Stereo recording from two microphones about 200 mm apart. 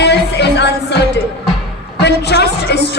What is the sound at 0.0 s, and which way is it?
Music, 60° left (ahead or behind).